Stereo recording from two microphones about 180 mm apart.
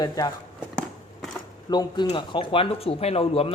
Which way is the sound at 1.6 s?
25° left (ahead or behind).